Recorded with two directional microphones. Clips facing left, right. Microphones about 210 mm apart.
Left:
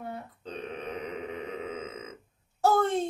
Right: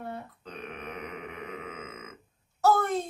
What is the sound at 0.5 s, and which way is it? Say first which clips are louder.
Burping: left 5 dB; 30° left (ahead or behind).